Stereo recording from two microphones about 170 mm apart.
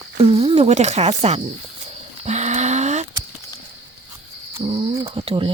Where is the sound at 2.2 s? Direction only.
40° right (ahead or behind).